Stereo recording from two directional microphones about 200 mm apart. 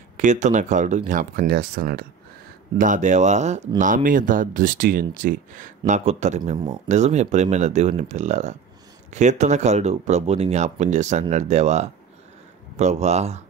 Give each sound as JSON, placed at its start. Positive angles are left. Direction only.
{"t": 0.2, "sound": "speech", "side_deg": -35}
{"t": 2.8, "sound": "speech", "side_deg": -40}